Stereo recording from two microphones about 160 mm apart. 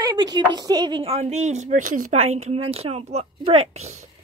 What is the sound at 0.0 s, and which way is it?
Speech, 25° right (ahead or behind).